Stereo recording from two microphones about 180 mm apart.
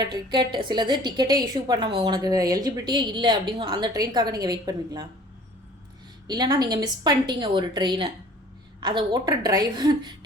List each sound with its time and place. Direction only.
0.0 s a woman's voice: 25° right (ahead or behind)
6.2 s a woman's voice: 20° right (ahead or behind)